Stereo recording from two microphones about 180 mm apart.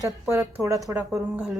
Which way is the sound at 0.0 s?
15° right (ahead or behind).